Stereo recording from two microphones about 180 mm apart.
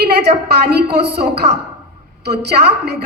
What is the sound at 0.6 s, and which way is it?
A woman's voice, 65° right (ahead or behind).